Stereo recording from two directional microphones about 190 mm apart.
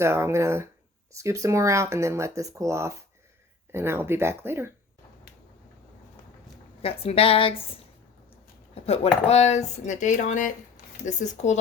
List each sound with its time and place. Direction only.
0.0 s speech: 15° right (ahead or behind)
6.8 s a woman's voice: 30° left (ahead or behind)
8.7 s speech: 35° left (ahead or behind)